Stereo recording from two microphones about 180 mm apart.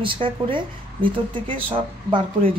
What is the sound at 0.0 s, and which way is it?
Speech, 30° right (ahead or behind).